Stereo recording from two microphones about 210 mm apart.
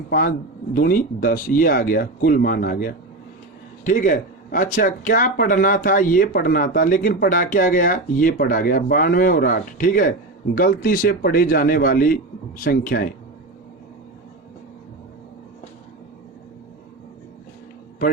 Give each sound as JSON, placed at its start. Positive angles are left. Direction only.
{"t": 0.1, "sound": "speech", "side_deg": 45}